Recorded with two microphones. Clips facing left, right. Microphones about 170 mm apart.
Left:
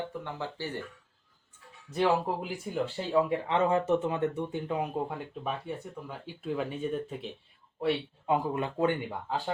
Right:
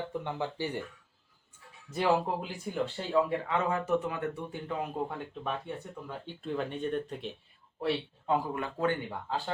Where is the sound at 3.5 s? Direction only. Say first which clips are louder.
Left 4 dB; 25° left (ahead or behind).